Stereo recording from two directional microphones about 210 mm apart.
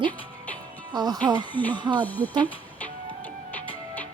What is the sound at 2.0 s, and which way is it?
Speech, 10° left (ahead or behind).